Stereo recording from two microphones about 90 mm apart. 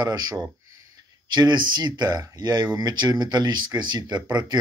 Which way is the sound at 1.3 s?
55° right (ahead or behind).